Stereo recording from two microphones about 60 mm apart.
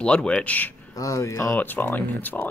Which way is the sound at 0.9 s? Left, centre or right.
Left.